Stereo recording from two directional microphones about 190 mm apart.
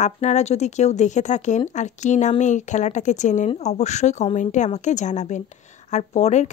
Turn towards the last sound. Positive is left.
turn(degrees=35)  # may be behind; listen again after turning